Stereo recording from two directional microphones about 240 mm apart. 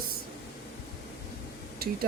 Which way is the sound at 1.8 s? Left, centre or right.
Right.